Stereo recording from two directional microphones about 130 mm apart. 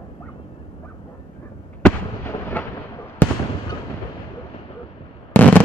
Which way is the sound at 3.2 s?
15° left (ahead or behind).